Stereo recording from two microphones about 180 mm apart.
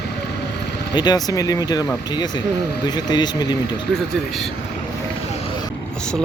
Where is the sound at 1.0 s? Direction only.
20° left (ahead or behind).